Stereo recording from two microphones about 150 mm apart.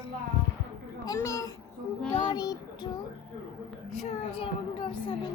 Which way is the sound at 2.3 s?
25° left (ahead or behind).